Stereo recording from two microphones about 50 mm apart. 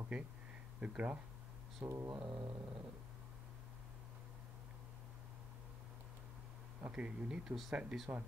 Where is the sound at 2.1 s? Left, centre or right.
Right.